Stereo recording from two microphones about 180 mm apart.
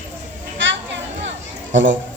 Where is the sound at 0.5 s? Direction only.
90° right.